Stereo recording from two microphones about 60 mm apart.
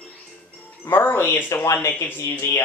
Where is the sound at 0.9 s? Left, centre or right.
Left.